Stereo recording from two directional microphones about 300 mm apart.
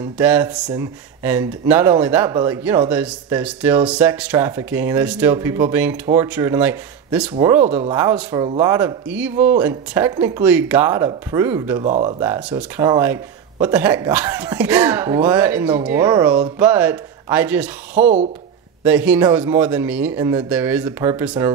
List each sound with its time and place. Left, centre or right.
0.2 s speech: centre
18.0 s speech: right
18.9 s speech: centre